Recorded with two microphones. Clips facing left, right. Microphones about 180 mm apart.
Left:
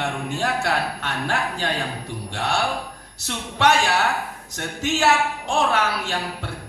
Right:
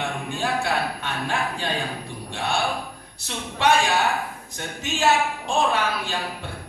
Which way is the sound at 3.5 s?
85° left.